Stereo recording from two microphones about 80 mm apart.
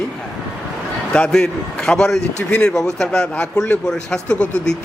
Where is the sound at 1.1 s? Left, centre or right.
Centre.